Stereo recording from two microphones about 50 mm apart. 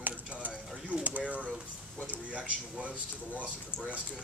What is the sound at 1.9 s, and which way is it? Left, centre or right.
Speech, left.